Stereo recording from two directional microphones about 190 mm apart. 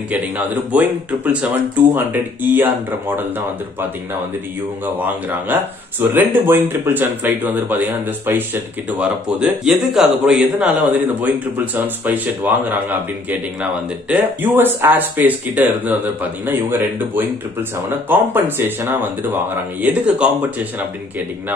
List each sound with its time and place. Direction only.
0.1 s speech: 10° right (ahead or behind)
4.9 s a man's voice: 10° right (ahead or behind)